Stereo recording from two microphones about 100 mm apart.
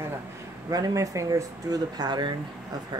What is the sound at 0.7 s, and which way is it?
Speech, 35° right (ahead or behind).